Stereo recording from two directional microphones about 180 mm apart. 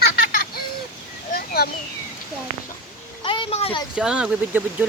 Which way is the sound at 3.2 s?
30° left (ahead or behind).